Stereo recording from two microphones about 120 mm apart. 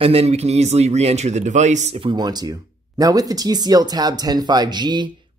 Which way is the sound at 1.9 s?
40° right (ahead or behind).